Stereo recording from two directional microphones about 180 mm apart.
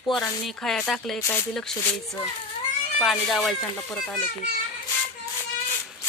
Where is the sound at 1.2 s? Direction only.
15° left (ahead or behind).